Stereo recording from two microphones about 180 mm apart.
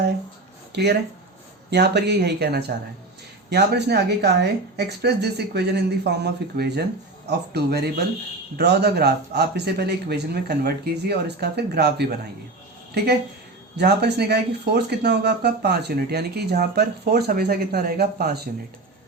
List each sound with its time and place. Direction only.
0.7 s speech: 65° right (ahead or behind)
13.7 s speech: 65° right (ahead or behind)